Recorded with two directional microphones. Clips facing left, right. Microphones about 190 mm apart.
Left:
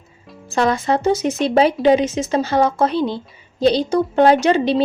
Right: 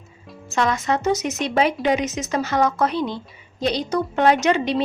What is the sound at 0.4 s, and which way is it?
A woman's voice, 35° left (ahead or behind).